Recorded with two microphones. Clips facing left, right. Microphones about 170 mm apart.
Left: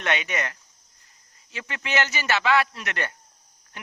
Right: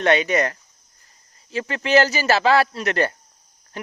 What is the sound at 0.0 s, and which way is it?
A man's voice, 35° right (ahead or behind).